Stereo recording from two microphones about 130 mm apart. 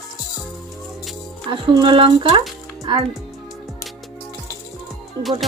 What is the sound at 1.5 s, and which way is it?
Speech, 40° right (ahead or behind).